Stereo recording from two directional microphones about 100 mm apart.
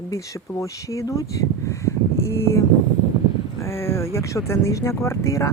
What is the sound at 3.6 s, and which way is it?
Speech, 25° left (ahead or behind).